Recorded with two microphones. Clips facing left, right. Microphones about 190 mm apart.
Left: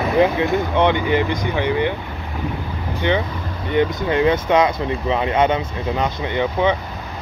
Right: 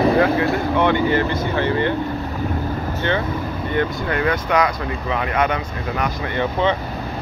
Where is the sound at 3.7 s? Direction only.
20° left (ahead or behind).